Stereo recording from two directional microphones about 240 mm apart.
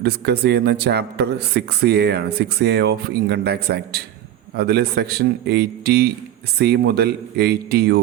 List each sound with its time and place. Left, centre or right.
0.0 s a man's voice: right